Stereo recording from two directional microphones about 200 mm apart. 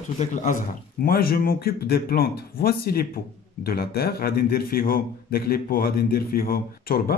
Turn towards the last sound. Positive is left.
turn(degrees=50)  # may be behind; listen again after turning